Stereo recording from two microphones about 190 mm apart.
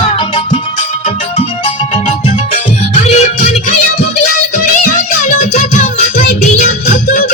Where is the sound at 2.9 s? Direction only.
35° left (ahead or behind).